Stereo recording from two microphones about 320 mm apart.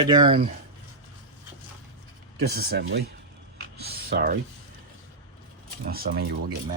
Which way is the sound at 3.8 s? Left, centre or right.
Right.